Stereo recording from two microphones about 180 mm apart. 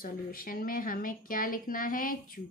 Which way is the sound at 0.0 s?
50° left (ahead or behind).